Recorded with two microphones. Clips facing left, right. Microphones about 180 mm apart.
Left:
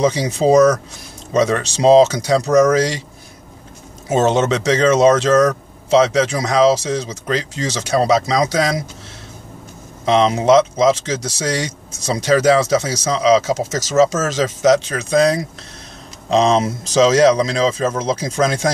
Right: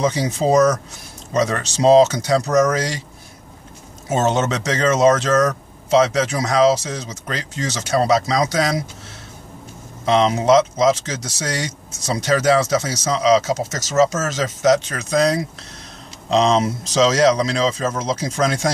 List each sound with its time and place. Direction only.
0.0 s speech: centre (ahead or behind)
4.1 s speech: centre (ahead or behind)
11.1 s speech: centre (ahead or behind)